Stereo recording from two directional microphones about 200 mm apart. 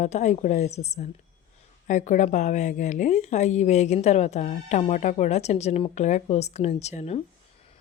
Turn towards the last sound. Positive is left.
turn(degrees=35)  # may be behind; listen again after turning